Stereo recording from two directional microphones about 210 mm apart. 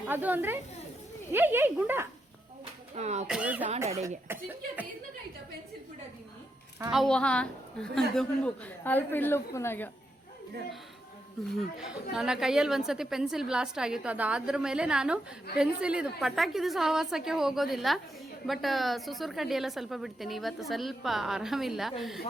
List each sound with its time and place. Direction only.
0.1 s speech: 10° right (ahead or behind)
2.9 s speech: 30° right (ahead or behind)
3.2 s speech: 5° right (ahead or behind)
6.9 s a woman's voice: centre (ahead or behind)
11.4 s a woman's voice: centre (ahead or behind)